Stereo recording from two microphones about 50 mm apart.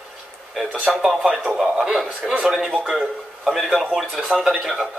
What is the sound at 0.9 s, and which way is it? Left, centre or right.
Speech, centre.